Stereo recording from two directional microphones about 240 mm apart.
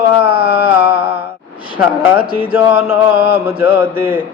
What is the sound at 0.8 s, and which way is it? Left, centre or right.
Mantra, centre.